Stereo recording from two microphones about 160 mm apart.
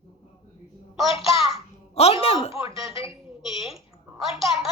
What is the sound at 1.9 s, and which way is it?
Speech, 40° left (ahead or behind).